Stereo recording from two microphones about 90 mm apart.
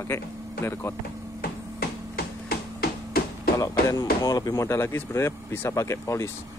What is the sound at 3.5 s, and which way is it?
A man's voice, 45° left (ahead or behind).